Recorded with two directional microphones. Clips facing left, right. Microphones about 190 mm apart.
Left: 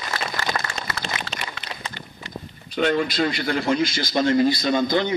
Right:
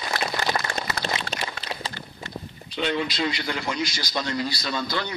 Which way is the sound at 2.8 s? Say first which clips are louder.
Left 5 dB; 50° left (ahead or behind).